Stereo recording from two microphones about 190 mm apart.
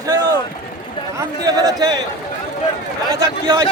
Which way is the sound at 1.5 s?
20° right (ahead or behind).